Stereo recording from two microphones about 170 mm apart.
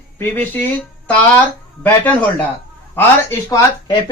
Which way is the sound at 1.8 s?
10° left (ahead or behind).